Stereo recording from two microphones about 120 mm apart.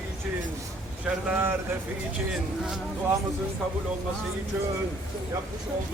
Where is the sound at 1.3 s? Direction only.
15° right (ahead or behind).